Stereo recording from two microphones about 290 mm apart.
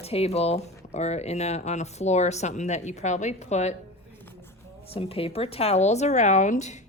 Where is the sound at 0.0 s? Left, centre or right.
Left.